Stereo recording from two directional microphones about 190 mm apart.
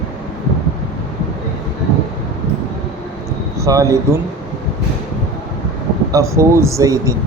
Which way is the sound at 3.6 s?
15° right (ahead or behind).